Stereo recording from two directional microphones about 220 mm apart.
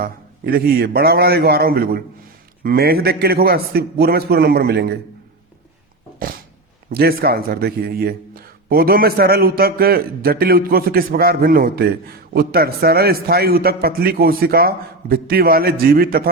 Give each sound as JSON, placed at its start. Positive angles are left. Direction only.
{"t": 0.0, "sound": "speech", "side_deg": -40}
{"t": 6.9, "sound": "speech", "side_deg": -45}